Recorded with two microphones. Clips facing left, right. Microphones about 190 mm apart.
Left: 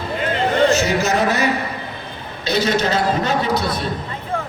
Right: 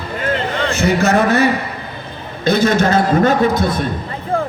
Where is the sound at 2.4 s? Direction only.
50° right (ahead or behind).